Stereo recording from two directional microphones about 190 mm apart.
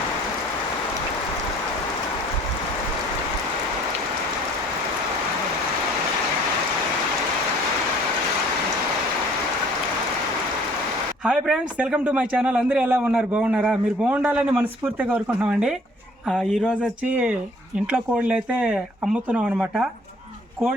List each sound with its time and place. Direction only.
11.3 s a man's voice: 5° right (ahead or behind)